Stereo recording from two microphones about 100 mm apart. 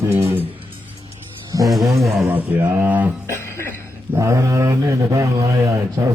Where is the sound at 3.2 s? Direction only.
25° left (ahead or behind).